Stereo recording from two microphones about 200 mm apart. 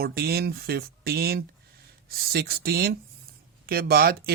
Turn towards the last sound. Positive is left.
turn(degrees=-50)  # may be behind; listen again after turning